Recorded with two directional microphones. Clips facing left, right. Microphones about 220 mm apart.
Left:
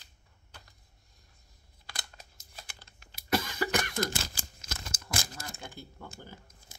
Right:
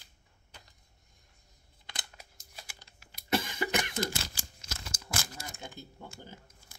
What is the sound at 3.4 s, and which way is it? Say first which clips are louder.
Cough: left 1 dB; 20° right (ahead or behind).